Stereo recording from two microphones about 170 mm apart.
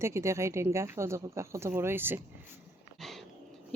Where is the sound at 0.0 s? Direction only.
15° right (ahead or behind).